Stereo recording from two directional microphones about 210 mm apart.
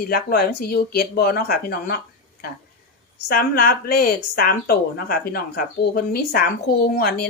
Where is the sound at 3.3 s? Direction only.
45° left (ahead or behind).